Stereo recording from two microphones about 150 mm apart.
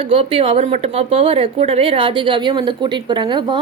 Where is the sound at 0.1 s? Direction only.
40° right (ahead or behind).